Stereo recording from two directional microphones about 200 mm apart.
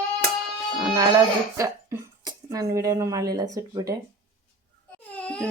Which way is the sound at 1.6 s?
15° right (ahead or behind).